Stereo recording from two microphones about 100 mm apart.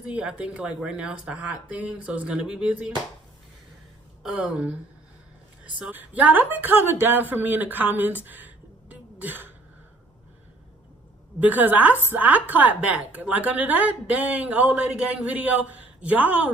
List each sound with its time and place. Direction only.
0.0 s a woman's voice: 10° right (ahead or behind)
4.2 s a woman's voice: 5° right (ahead or behind)
5.8 s a woman's voice: 15° right (ahead or behind)
8.2 s a sound: 20° right (ahead or behind)
11.3 s a woman's voice: 15° right (ahead or behind)